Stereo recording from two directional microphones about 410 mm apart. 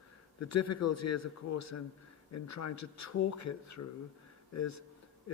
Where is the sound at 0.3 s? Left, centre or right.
Left.